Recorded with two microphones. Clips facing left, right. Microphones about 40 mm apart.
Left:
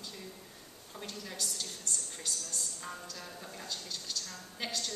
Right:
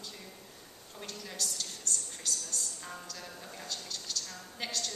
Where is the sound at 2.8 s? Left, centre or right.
Centre.